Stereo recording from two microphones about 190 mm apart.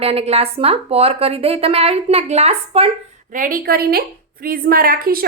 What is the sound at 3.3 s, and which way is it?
A woman's voice, 45° right (ahead or behind).